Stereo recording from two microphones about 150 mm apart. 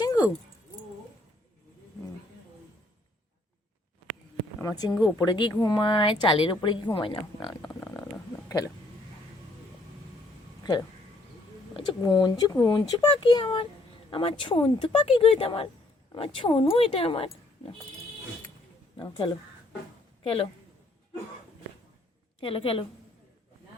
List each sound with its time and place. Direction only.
4.6 s speech: 25° left (ahead or behind)
7.7 s a sound: 15° left (ahead or behind)
10.6 s a sound: 25° left (ahead or behind)
12.0 s speech: 30° left (ahead or behind)
18.9 s speech: 35° left (ahead or behind)
22.4 s speech: 40° left (ahead or behind)